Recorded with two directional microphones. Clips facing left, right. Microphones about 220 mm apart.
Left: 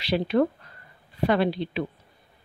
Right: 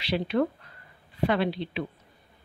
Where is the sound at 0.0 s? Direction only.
40° left (ahead or behind).